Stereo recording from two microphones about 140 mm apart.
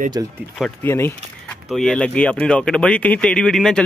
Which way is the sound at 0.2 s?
25° right (ahead or behind).